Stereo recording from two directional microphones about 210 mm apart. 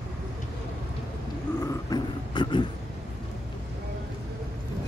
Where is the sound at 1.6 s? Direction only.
15° left (ahead or behind).